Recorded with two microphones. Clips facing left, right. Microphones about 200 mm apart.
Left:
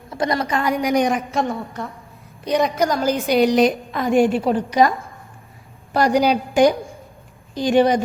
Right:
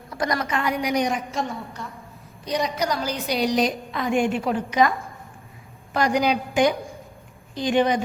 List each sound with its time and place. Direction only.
0.1 s a woman's voice: 25° left (ahead or behind); by 8.0 s 40° left (ahead or behind)